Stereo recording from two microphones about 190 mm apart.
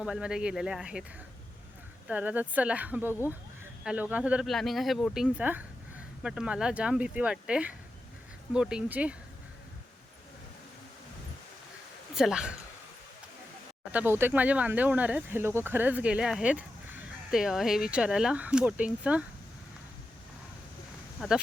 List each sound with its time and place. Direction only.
0.0 s speech: 5° right (ahead or behind)
2.0 s speech: 5° right (ahead or behind)
12.1 s speech: 5° right (ahead or behind)
13.9 s speech: 10° right (ahead or behind)
21.2 s speech: 5° right (ahead or behind)